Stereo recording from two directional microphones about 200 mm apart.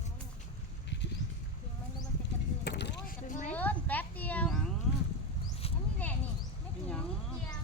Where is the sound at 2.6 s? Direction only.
60° left (ahead or behind).